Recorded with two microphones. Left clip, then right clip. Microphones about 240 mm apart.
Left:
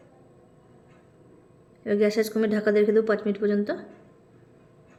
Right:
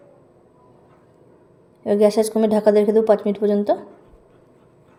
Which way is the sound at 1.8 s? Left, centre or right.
Centre.